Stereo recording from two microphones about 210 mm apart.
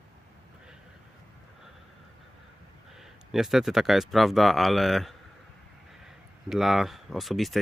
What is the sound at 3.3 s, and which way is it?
Speech, centre (ahead or behind).